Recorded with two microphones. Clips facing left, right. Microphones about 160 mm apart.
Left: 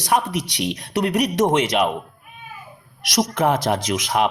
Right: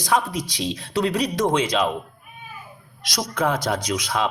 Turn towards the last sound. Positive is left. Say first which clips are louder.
# left 3 dB
turn(degrees=20)  # may be behind; listen again after turning